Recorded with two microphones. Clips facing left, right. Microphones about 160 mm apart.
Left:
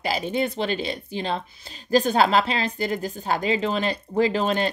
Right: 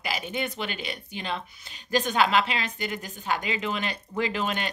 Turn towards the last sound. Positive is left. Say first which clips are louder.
# left 7 dB
turn(degrees=35)  # may be behind; listen again after turning